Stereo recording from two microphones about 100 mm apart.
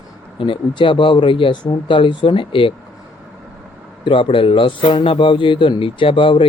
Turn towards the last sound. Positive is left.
turn(degrees=60)  # may be behind; listen again after turning